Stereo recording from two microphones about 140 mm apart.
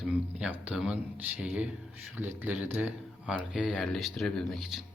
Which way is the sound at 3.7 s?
5° left (ahead or behind).